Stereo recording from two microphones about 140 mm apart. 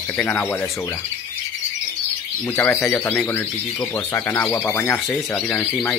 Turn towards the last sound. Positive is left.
turn(degrees=10)  # may be behind; listen again after turning